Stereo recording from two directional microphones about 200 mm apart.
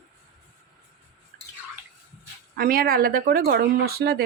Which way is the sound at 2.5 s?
45° right (ahead or behind).